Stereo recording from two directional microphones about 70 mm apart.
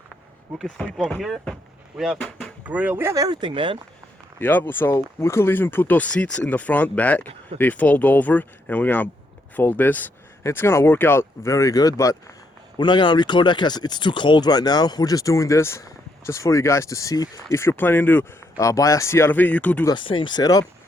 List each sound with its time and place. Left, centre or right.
0.5 s speech: centre
2.6 s speech: right
3.2 s speech: right
4.4 s speech: left
4.9 s speech: left
10.4 s speech: left
12.7 s speech: left
18.5 s speech: left
19.3 s speech: left
19.9 s speech: left